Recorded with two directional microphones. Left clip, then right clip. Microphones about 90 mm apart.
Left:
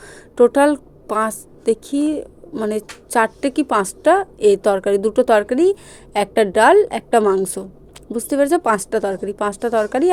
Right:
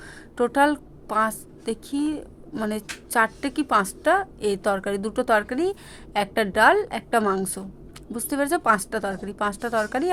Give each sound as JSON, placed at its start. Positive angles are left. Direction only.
{"t": 0.0, "sound": "a woman's voice", "side_deg": 35}